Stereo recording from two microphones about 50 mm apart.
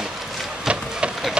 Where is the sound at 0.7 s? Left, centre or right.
Centre.